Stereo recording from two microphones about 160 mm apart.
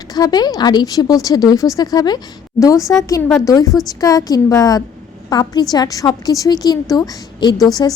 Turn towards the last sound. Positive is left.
turn(degrees=25)  # may be behind; listen again after turning